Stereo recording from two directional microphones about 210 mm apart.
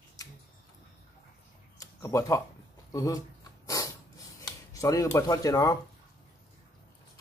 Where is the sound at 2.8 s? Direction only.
15° left (ahead or behind).